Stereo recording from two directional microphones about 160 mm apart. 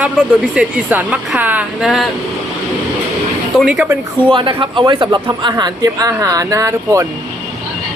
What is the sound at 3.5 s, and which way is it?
Speech, 5° right (ahead or behind).